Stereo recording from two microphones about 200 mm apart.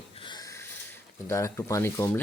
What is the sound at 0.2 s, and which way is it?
Snort, 20° left (ahead or behind).